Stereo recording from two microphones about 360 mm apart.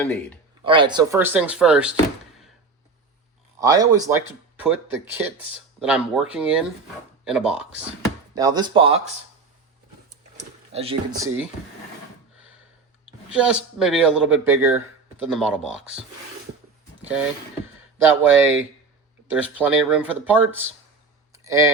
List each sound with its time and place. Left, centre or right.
0.0 s speech: centre
0.6 s speech: centre
3.6 s speech: centre
10.3 s speech: centre
13.3 s speech: centre
18.0 s speech: centre
21.3 s a sound: centre